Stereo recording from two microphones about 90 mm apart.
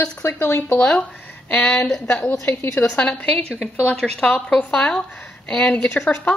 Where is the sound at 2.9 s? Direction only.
15° left (ahead or behind).